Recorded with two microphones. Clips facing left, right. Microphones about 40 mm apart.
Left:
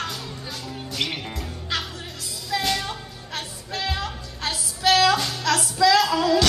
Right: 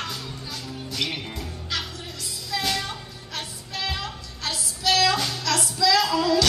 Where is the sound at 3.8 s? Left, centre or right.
Centre.